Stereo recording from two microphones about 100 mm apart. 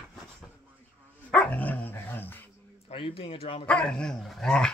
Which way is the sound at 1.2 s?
15° left (ahead or behind).